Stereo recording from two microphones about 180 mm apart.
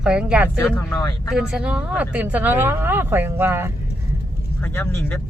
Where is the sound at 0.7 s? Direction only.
20° left (ahead or behind).